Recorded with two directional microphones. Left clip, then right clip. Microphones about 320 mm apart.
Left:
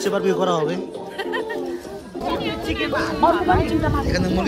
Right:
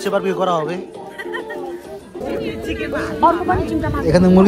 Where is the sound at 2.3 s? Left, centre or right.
Left.